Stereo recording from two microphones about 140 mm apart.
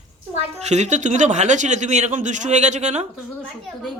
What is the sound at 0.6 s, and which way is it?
Speech, 55° right (ahead or behind).